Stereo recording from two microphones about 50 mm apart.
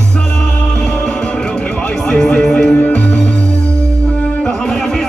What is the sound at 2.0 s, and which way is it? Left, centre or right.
Music, centre.